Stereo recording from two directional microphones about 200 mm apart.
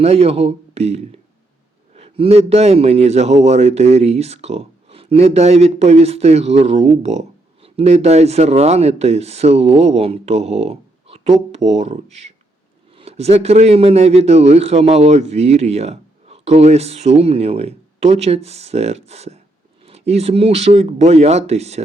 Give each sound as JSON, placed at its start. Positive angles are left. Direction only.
{"t": 0.0, "sound": "a man's voice", "side_deg": -30}